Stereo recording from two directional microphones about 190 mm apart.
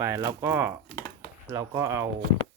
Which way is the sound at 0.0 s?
15° right (ahead or behind).